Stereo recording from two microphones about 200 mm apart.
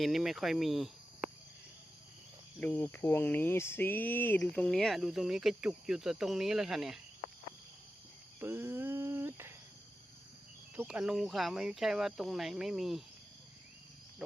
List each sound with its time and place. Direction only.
0.0 s cricket: centre (ahead or behind)
2.6 s cricket: 10° left (ahead or behind)
8.4 s cricket: 10° right (ahead or behind)
10.8 s cricket: 5° right (ahead or behind)
14.2 s cricket: 5° right (ahead or behind)